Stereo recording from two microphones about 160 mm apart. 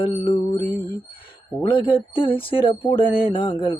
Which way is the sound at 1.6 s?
35° left (ahead or behind).